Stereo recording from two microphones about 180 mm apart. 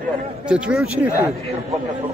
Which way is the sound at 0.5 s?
5° right (ahead or behind).